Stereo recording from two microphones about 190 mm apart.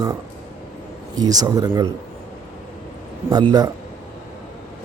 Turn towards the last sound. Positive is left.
turn(degrees=-20)  # may be behind; listen again after turning